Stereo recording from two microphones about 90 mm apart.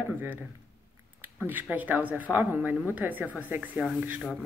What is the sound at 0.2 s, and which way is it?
Speech, 20° right (ahead or behind).